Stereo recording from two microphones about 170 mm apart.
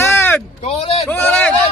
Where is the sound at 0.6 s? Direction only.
35° left (ahead or behind).